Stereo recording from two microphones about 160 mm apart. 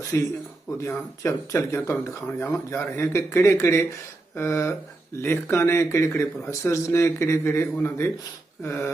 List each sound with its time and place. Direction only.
0.0 s speech: 20° left (ahead or behind)